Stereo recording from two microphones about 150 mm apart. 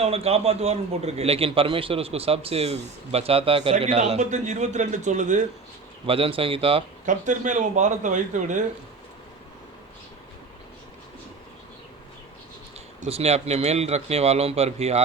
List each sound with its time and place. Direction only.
0.0 s a man's voice: 45° right (ahead or behind)
6.1 s speech: 40° right (ahead or behind)
7.0 s a man's voice: 60° right (ahead or behind)
13.0 s a man's voice: 45° right (ahead or behind)